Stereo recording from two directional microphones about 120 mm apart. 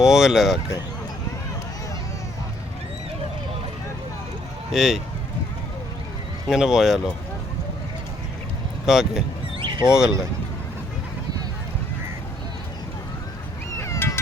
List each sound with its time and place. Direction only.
0.0 s speech: 5° right (ahead or behind)
4.7 s speech: centre (ahead or behind)
6.5 s speech: 5° right (ahead or behind)
8.9 s speech: 5° right (ahead or behind)
9.6 s a sound: 40° right (ahead or behind)
9.8 s speech: 5° right (ahead or behind)
13.7 s cat: 25° left (ahead or behind)